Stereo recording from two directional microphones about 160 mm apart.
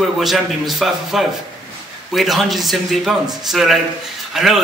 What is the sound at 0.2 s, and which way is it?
A man's voice, centre (ahead or behind).